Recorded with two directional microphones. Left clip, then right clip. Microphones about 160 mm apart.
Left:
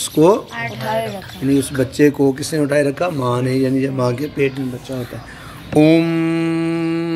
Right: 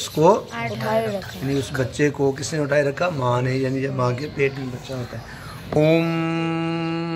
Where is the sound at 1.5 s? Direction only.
40° left (ahead or behind).